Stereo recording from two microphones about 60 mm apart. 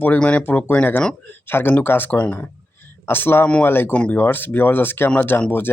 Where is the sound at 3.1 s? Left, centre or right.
Left.